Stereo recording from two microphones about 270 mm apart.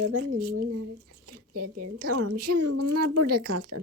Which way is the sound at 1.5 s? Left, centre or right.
Right.